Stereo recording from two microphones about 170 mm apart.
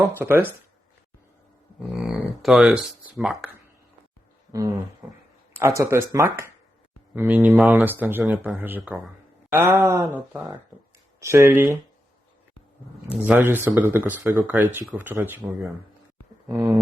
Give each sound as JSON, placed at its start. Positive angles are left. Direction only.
{"t": 0.2, "sound": "speech", "side_deg": -15}
{"t": 1.9, "sound": "speech", "side_deg": -5}
{"t": 4.5, "sound": "roaring cats", "side_deg": -20}
{"t": 5.0, "sound": "speech", "side_deg": -15}
{"t": 11.2, "sound": "speech", "side_deg": -15}
{"t": 13.1, "sound": "speech", "side_deg": -5}